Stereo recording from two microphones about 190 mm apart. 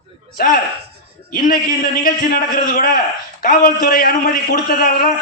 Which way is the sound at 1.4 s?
50° left (ahead or behind).